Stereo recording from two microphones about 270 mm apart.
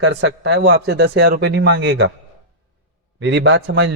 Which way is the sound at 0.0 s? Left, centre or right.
Right.